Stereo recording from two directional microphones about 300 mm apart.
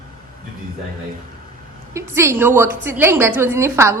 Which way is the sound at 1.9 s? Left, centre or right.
Centre.